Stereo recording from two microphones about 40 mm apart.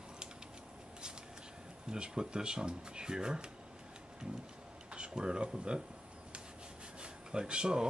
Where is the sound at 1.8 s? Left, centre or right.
Right.